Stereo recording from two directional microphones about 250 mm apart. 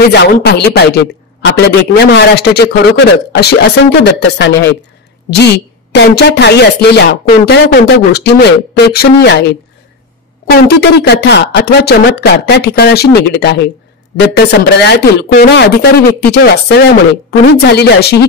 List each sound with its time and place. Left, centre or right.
0.1 s a man's voice: left
5.9 s a man's voice: left